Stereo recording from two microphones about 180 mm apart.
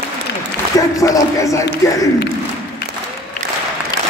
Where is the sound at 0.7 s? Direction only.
20° left (ahead or behind).